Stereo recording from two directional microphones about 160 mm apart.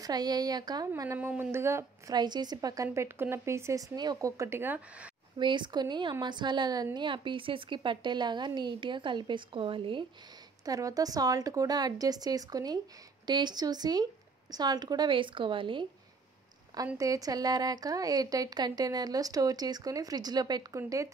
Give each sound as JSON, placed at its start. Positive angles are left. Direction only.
{"t": 0.0, "sound": "speech", "side_deg": -25}
{"t": 5.4, "sound": "speech", "side_deg": -30}
{"t": 10.6, "sound": "a woman's voice", "side_deg": -20}
{"t": 16.7, "sound": "speech", "side_deg": -20}